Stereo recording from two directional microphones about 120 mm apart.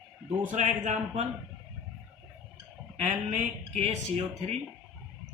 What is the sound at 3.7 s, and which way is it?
Speech, 70° right (ahead or behind).